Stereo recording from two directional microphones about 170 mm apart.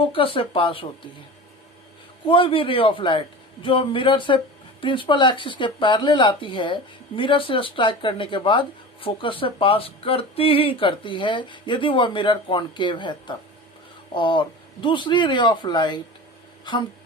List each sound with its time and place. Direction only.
0.0 s a man's voice: 30° left (ahead or behind)
2.2 s a man's voice: 30° left (ahead or behind)